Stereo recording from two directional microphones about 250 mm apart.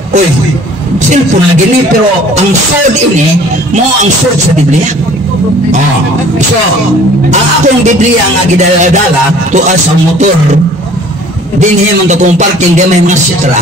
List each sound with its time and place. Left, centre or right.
7.2 s a man's voice: right
11.6 s a man's voice: right